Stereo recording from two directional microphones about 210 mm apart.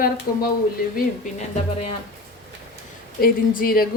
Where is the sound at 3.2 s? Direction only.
45° left (ahead or behind).